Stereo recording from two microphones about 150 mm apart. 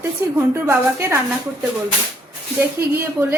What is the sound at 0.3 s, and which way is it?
Speech, 15° right (ahead or behind).